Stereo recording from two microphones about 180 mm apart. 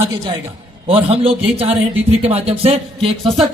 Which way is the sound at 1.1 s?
30° right (ahead or behind).